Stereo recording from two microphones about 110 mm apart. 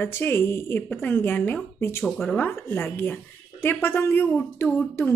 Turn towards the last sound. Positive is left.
turn(degrees=20)  # may be behind; listen again after turning